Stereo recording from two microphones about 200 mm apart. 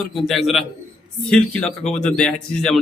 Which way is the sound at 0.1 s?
Centre (ahead or behind).